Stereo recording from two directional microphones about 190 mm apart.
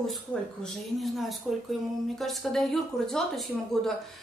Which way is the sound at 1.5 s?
Centre (ahead or behind).